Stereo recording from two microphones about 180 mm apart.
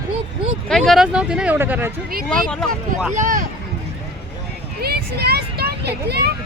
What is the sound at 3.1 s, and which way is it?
Speech, 45° right (ahead or behind).